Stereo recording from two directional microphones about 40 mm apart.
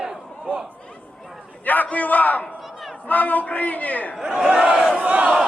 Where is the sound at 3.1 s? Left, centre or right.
Left.